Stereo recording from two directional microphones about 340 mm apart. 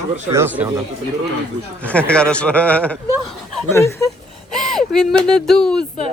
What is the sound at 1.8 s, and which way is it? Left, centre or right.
Speech, centre.